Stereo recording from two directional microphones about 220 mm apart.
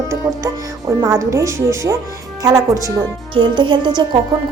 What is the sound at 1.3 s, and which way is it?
Speech, 15° right (ahead or behind).